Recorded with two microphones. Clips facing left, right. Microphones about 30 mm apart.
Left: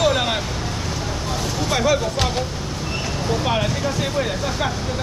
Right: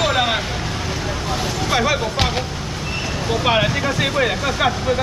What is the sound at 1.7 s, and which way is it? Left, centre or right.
Speech, right.